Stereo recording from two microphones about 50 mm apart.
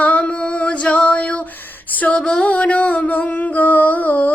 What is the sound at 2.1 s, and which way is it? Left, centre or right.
Music, centre.